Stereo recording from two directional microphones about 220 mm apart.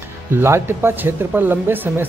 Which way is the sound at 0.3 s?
10° right (ahead or behind).